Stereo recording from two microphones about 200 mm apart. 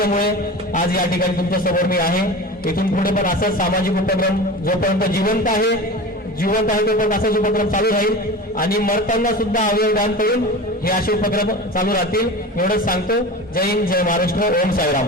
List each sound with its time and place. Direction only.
0.0 s a man's voice: 50° left (ahead or behind)